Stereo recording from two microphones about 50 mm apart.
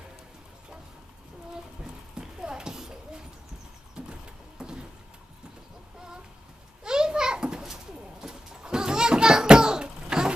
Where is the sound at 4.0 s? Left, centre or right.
Centre.